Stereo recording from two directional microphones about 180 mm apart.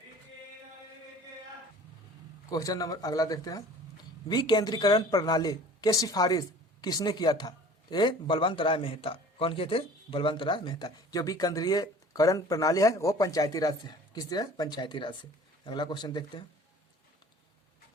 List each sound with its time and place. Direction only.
2.5 s a man's voice: 20° left (ahead or behind)